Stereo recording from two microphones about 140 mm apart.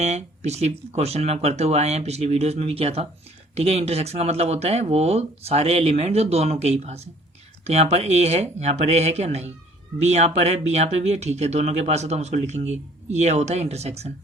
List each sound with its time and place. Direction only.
0.0 s speech: 50° right (ahead or behind)